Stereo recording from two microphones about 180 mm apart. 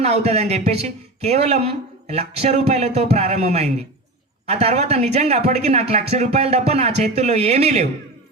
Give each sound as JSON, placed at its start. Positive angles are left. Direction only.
{"t": 0.0, "sound": "speech", "side_deg": -35}